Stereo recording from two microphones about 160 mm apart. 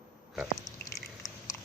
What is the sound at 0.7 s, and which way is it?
Drip, 20° left (ahead or behind).